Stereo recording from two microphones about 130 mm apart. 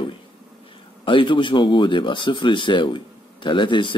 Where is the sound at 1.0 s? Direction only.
40° left (ahead or behind).